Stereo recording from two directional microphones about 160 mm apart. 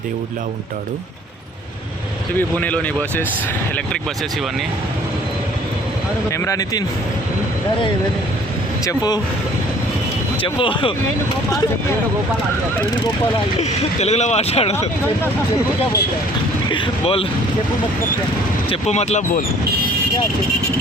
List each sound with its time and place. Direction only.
2.6 s speech: 10° left (ahead or behind)
6.3 s speech: 20° left (ahead or behind)
8.8 s speech: 25° left (ahead or behind)
10.4 s speech: 30° left (ahead or behind)
13.6 s speech: 45° left (ahead or behind)
16.6 s speech: 30° left (ahead or behind)
18.7 s speech: 40° left (ahead or behind)